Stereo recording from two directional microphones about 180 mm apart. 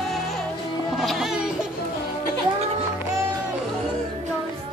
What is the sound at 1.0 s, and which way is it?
Music, centre (ahead or behind).